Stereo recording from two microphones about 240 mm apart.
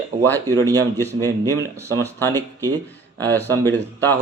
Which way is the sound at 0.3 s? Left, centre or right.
Centre.